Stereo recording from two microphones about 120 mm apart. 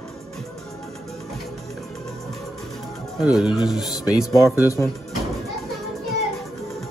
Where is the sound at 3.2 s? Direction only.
Centre (ahead or behind).